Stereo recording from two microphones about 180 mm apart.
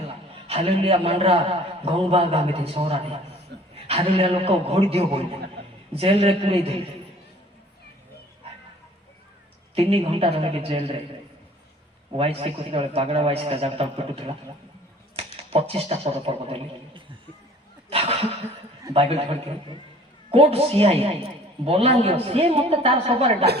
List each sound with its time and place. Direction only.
0.4 s a man's voice: 35° right (ahead or behind)
3.5 s chuckle: 70° right (ahead or behind)
3.8 s a man's voice: 30° right (ahead or behind)
9.7 s a man's voice: 35° right (ahead or behind)
12.1 s a man's voice: 30° right (ahead or behind)